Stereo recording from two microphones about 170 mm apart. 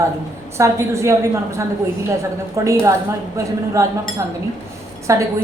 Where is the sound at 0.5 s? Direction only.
15° right (ahead or behind).